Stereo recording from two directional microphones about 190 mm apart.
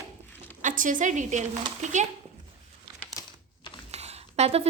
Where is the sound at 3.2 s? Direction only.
20° left (ahead or behind).